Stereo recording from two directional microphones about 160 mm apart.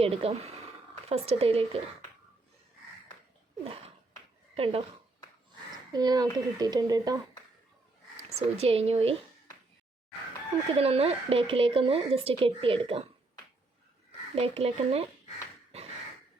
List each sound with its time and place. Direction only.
0.0 s speech: 40° right (ahead or behind)
3.6 s a sound: 35° right (ahead or behind)
4.5 s speech: 35° right (ahead or behind)
5.9 s speech: 25° right (ahead or behind)
8.4 s speech: 40° right (ahead or behind)
10.8 s speech: 35° right (ahead or behind)
14.3 s speech: 40° right (ahead or behind)